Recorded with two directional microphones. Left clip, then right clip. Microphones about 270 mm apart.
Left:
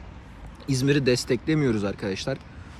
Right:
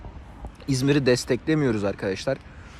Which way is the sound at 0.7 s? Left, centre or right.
Centre.